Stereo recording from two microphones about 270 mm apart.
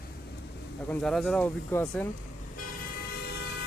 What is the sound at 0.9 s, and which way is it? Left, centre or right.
Speech, centre.